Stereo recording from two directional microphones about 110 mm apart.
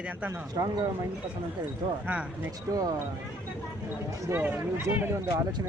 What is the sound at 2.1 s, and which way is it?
Speech, 15° right (ahead or behind).